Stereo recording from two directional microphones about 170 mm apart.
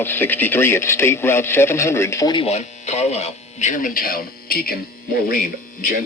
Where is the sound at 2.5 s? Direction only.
40° left (ahead or behind).